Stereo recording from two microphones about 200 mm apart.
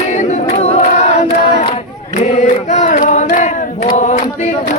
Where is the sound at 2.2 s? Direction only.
35° left (ahead or behind).